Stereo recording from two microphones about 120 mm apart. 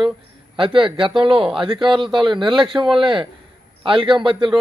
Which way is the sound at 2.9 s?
45° right (ahead or behind).